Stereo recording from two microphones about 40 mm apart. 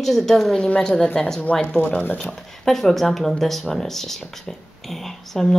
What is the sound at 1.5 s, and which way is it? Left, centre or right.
Speech, left.